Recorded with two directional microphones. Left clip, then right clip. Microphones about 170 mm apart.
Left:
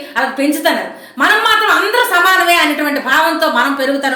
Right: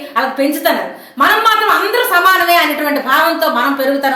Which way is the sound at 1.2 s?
5° left (ahead or behind).